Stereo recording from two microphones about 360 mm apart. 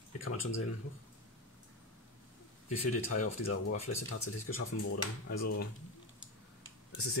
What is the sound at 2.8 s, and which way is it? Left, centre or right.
Speech, left.